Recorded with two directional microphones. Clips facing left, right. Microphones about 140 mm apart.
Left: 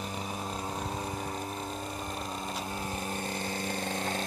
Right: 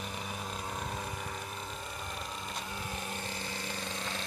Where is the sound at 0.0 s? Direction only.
35° left (ahead or behind).